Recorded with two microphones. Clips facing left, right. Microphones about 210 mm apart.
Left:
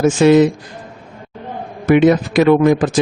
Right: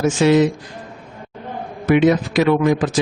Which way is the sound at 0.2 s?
50° left (ahead or behind).